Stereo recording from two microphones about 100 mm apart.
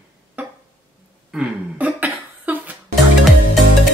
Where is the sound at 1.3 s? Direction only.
10° right (ahead or behind).